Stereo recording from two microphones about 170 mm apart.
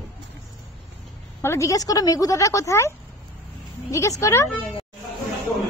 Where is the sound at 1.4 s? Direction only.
15° left (ahead or behind).